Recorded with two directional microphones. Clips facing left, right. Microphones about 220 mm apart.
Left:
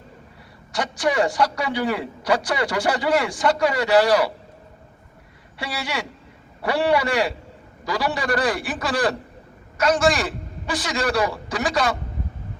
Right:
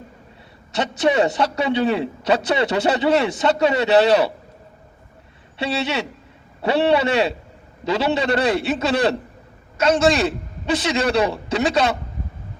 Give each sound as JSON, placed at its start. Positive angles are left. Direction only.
{"t": 0.7, "sound": "a man's voice", "side_deg": -25}
{"t": 5.5, "sound": "a man's voice", "side_deg": -25}